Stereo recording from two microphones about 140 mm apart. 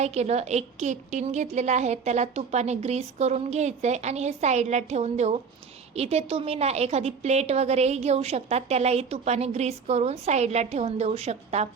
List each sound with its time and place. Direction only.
0.0 s a woman's voice: 50° right (ahead or behind)